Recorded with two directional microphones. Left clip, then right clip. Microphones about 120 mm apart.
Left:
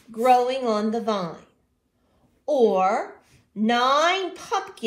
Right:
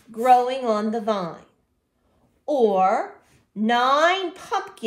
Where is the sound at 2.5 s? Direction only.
55° right (ahead or behind).